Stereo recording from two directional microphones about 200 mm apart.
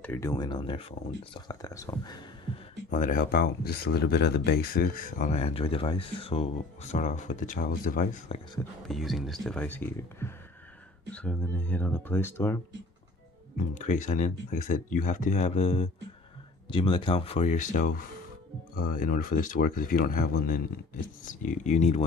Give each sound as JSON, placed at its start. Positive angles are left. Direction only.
{"t": 0.0, "sound": "speech", "side_deg": 10}
{"t": 2.9, "sound": "speech", "side_deg": 40}
{"t": 8.8, "sound": "speech", "side_deg": 0}
{"t": 13.6, "sound": "speech", "side_deg": 40}